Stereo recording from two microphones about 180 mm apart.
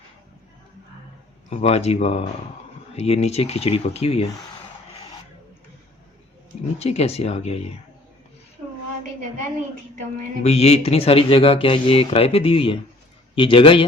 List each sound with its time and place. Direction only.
1.5 s speech: 35° left (ahead or behind)
6.7 s speech: 35° left (ahead or behind)
10.4 s speech: 35° left (ahead or behind)